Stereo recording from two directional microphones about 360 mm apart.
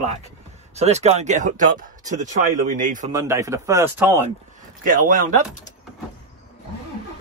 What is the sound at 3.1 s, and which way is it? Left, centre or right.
Speech, centre.